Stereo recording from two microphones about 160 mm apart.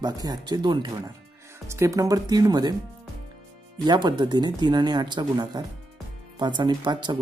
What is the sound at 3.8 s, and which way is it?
Speech, 25° right (ahead or behind).